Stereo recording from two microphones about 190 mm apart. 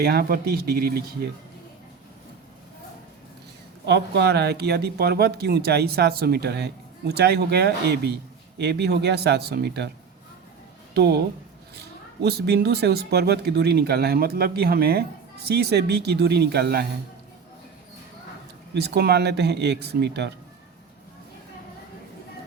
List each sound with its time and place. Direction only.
0.0 s speech: 55° right (ahead or behind)
3.8 s speech: 65° right (ahead or behind)
10.9 s speech: 60° right (ahead or behind)
12.2 s speech: 60° right (ahead or behind)
18.7 s speech: 60° right (ahead or behind)